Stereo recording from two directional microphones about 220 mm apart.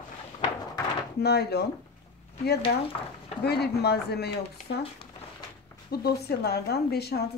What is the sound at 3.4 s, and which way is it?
A woman's voice, 45° left (ahead or behind).